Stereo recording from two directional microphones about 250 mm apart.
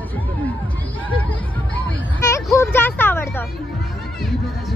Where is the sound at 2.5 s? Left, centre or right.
Centre.